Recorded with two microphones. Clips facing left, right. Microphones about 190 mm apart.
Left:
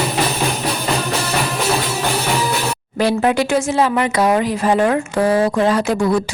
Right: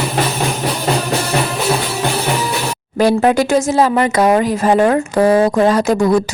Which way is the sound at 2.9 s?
40° right (ahead or behind).